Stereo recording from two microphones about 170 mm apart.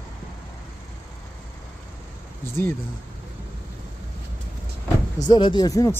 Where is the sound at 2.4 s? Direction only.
15° left (ahead or behind).